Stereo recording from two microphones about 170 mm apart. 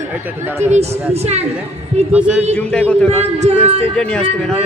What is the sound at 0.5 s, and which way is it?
Speech, 40° right (ahead or behind).